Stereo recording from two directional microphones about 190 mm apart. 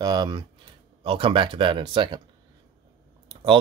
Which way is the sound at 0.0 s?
20° right (ahead or behind).